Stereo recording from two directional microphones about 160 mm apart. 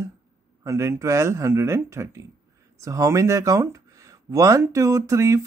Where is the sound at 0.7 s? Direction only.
20° right (ahead or behind).